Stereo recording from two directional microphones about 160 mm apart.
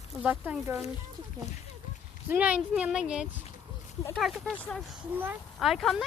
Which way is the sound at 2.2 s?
10° right (ahead or behind).